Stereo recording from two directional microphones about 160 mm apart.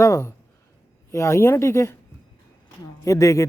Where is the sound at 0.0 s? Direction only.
20° left (ahead or behind).